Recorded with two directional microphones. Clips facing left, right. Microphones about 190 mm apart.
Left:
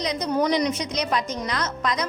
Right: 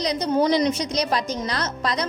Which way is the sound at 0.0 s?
35° right (ahead or behind).